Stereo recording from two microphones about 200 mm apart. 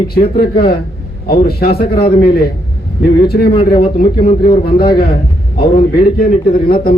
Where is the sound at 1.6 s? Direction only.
50° left (ahead or behind).